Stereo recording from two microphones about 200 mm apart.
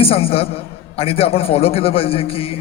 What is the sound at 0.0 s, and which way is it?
A man's voice, 30° left (ahead or behind).